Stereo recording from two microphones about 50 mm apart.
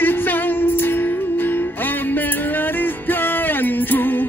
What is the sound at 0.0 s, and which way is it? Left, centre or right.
Music, left.